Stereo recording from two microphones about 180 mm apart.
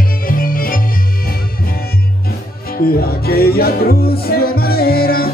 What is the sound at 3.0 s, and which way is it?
Music, 55° left (ahead or behind).